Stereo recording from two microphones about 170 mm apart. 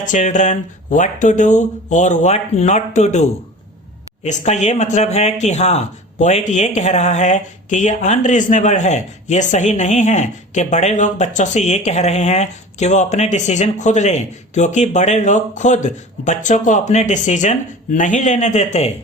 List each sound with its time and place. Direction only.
0.0 s speech: 45° left (ahead or behind)